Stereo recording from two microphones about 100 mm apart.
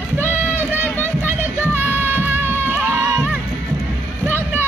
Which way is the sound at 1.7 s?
20° right (ahead or behind).